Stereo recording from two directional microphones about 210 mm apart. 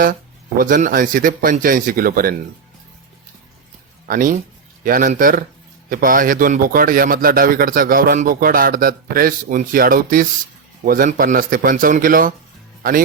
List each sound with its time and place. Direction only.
0.6 s a man's voice: 40° right (ahead or behind)
4.1 s a man's voice: 40° right (ahead or behind)